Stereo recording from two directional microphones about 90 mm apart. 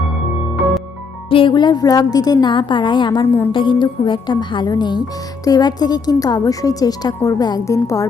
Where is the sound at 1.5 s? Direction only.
55° left (ahead or behind).